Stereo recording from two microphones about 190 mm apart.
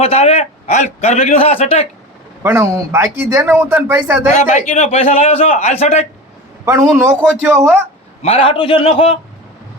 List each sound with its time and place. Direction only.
0.0 s a man's voice: 30° left (ahead or behind)
2.4 s speech: 15° right (ahead or behind)
4.5 s a man's voice: 35° left (ahead or behind)
6.7 s speech: 15° right (ahead or behind)
8.2 s a man's voice: 30° left (ahead or behind)